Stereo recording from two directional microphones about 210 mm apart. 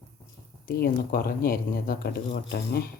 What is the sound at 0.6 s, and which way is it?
Speech, 45° left (ahead or behind).